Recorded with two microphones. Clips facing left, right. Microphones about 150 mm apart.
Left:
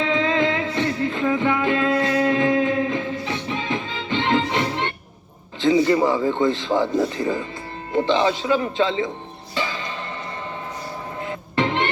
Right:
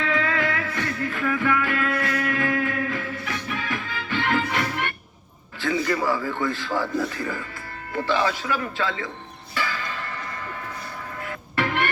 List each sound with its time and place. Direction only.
0.0 s music: 20° left (ahead or behind)
5.5 s a man's voice: 20° left (ahead or behind)
9.6 s music: 20° left (ahead or behind)
11.2 s music: 20° left (ahead or behind)